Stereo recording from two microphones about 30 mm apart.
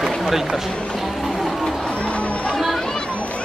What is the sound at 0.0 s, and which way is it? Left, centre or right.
Boat, centre.